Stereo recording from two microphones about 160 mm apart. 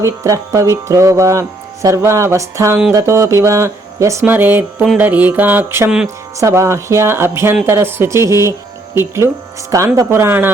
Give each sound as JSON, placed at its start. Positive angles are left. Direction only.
{"t": 0.0, "sound": "speech", "side_deg": -20}